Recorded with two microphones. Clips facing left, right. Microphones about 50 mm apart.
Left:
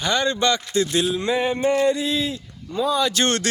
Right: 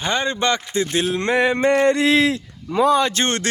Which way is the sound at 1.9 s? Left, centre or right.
Right.